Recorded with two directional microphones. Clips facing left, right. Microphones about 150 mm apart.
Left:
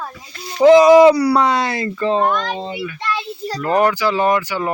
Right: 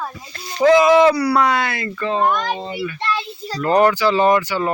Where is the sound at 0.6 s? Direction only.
15° left (ahead or behind).